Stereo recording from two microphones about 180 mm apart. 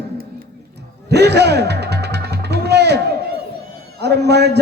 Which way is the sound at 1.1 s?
65° right (ahead or behind).